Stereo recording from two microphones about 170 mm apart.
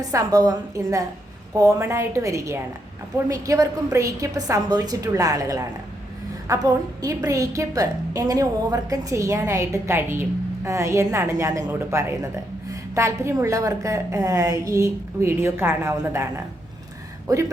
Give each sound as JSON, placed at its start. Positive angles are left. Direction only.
{"t": 0.1, "sound": "a woman's voice", "side_deg": -20}